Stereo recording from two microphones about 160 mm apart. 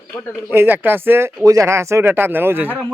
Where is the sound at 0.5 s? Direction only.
10° right (ahead or behind).